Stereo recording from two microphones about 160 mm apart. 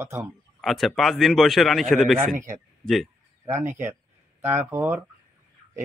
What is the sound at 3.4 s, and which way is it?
Speech, 15° right (ahead or behind).